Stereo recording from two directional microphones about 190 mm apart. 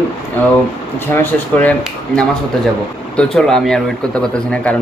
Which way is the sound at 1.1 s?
10° left (ahead or behind).